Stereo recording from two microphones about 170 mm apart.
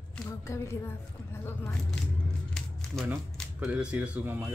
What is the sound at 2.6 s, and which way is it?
Crumpling, centre (ahead or behind).